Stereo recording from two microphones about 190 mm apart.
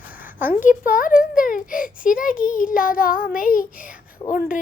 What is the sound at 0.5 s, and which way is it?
Speech, 45° left (ahead or behind).